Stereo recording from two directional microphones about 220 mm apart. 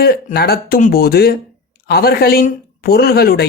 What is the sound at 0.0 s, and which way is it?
Speech, 45° left (ahead or behind).